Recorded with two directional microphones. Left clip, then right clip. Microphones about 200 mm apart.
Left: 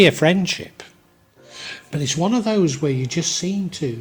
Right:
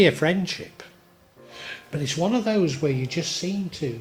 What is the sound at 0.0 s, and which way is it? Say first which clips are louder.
Speech: left 5 dB; 40° left (ahead or behind).